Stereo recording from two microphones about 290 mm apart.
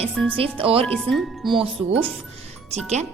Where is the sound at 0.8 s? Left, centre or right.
Centre.